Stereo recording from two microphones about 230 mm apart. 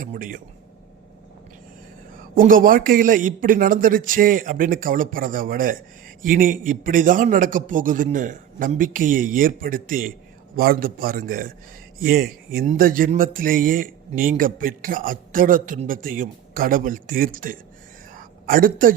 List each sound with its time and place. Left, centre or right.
0.0 s speech: right
2.3 s speech: right
18.1 s a sound: right